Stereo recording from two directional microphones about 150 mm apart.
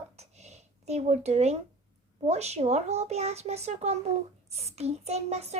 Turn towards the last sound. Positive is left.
turn(degrees=-45)  # may be behind; listen again after turning